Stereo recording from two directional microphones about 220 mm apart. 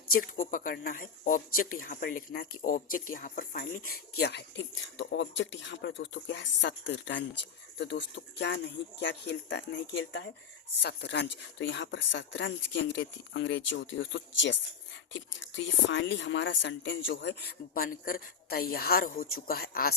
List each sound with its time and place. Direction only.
0.1 s speech: 40° left (ahead or behind)